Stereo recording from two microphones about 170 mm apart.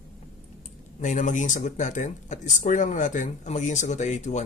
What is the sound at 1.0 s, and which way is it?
Speech, 50° left (ahead or behind).